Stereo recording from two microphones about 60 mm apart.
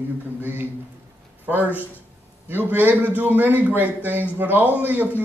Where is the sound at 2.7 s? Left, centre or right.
Right.